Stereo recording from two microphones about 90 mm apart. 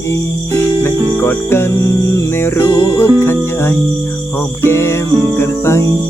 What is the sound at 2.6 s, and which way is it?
Music, 50° left (ahead or behind).